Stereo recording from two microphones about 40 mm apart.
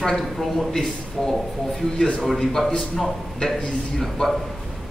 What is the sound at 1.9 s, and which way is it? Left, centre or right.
Speech, left.